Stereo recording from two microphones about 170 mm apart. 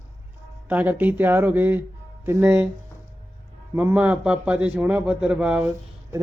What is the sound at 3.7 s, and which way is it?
A man's voice, 10° right (ahead or behind).